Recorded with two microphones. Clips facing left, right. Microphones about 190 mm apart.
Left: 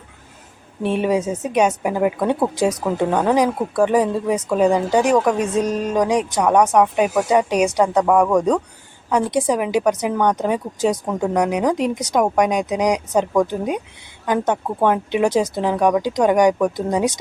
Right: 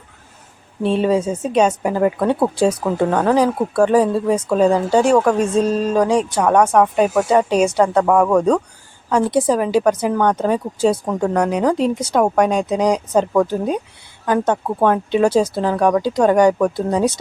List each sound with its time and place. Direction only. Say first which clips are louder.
0.8 s speech: right 2 dB; 15° left (ahead or behind)